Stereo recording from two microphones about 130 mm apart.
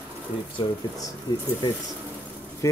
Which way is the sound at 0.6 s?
35° left (ahead or behind).